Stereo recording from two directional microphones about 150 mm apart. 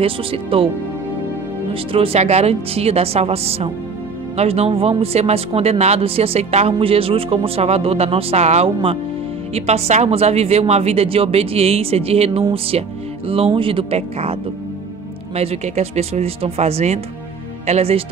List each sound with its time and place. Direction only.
0.0 s speech: 35° right (ahead or behind)
1.7 s speech: 40° right (ahead or behind)
15.3 s speech: 45° right (ahead or behind)